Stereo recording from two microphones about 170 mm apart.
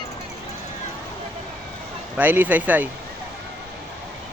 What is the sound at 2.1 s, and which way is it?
Speech, 10° right (ahead or behind).